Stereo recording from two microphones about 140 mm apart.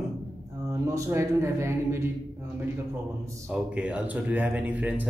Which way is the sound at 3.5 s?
10° right (ahead or behind).